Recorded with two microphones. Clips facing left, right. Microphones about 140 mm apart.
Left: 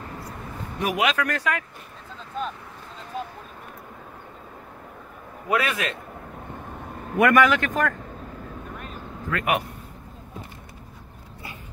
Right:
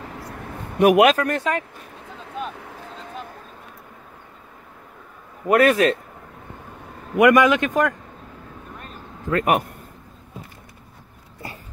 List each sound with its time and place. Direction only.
0.7 s speech: 60° right (ahead or behind)
1.1 s speech: 25° right (ahead or behind)
5.5 s a man's voice: 45° right (ahead or behind)
7.2 s a man's voice: 15° right (ahead or behind)
9.3 s a man's voice: 40° right (ahead or behind)